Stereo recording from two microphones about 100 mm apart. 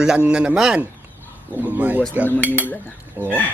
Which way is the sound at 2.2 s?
20° left (ahead or behind).